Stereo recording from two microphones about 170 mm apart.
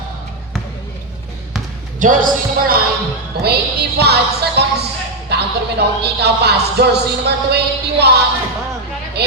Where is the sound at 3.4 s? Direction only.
70° right (ahead or behind).